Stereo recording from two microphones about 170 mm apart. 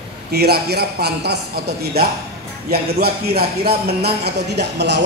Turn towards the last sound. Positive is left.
turn(degrees=-85)